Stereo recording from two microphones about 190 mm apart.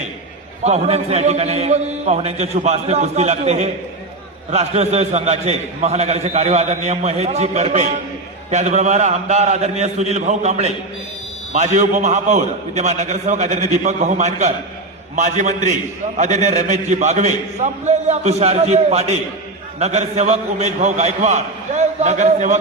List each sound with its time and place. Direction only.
0.6 s a man's voice: 35° right (ahead or behind)